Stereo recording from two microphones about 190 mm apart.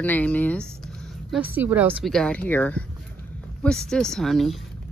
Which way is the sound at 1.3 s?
5° right (ahead or behind).